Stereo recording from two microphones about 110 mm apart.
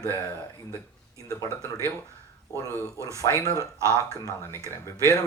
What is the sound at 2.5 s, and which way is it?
Speech, 25° left (ahead or behind).